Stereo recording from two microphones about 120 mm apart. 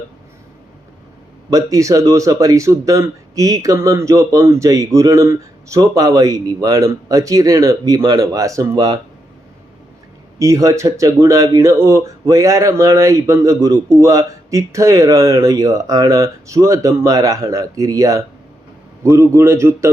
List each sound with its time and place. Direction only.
1.5 s speech: 30° right (ahead or behind)
10.3 s speech: 25° right (ahead or behind)